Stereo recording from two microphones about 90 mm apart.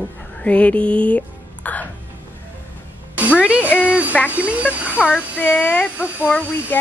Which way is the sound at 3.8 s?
15° right (ahead or behind).